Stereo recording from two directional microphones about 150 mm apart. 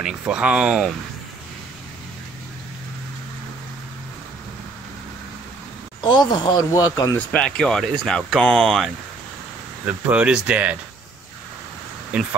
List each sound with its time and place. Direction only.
0.0 s speech: 5° right (ahead or behind)
5.9 s speech: 30° left (ahead or behind)
7.2 s speech: 5° left (ahead or behind)
9.8 s speech: 10° right (ahead or behind)
12.1 s speech: 10° right (ahead or behind)